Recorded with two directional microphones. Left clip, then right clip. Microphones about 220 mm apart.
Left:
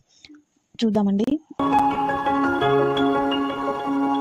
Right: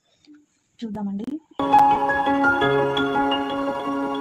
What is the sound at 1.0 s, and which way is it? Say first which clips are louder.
Speech: left 8 dB; 35° left (ahead or behind).